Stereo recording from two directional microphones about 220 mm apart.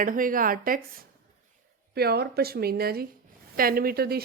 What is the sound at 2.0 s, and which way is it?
A woman's voice, 45° right (ahead or behind).